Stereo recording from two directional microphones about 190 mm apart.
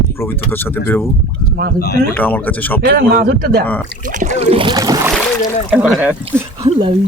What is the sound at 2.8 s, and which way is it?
Speech, 55° right (ahead or behind).